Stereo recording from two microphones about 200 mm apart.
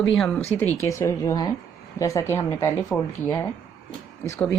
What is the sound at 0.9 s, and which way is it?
Speech, 15° left (ahead or behind).